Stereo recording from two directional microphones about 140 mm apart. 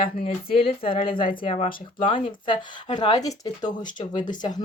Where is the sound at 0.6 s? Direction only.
40° left (ahead or behind).